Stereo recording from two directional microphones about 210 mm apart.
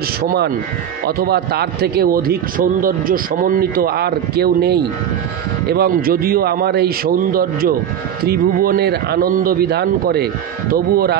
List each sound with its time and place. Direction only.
0.2 s a man's voice: 50° right (ahead or behind)